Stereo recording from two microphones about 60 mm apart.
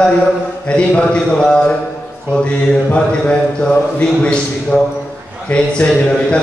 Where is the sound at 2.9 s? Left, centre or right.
Centre.